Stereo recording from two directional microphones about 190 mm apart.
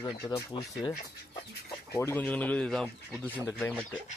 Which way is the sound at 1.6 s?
15° left (ahead or behind).